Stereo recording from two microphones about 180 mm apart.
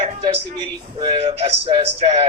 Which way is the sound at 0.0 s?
30° right (ahead or behind).